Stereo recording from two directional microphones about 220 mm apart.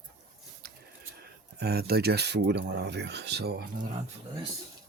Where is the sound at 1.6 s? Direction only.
45° right (ahead or behind).